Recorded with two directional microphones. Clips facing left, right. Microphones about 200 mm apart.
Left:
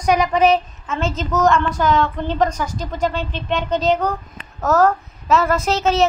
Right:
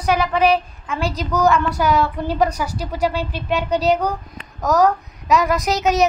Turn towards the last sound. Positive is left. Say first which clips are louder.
# even
turn(degrees=-15)  # may be behind; listen again after turning